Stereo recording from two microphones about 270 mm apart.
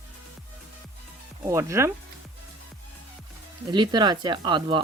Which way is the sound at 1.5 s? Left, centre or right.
Centre.